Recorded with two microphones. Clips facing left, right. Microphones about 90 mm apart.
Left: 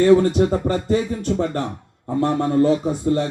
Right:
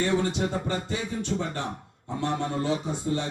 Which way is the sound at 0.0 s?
50° left (ahead or behind).